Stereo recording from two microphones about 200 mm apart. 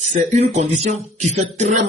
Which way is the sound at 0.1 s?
35° right (ahead or behind).